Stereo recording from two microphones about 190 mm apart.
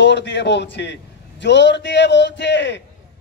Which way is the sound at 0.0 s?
65° left (ahead or behind).